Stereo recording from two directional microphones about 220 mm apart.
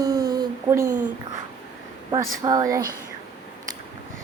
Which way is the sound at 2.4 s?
15° right (ahead or behind).